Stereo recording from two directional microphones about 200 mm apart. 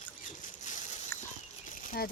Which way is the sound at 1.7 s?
45° left (ahead or behind).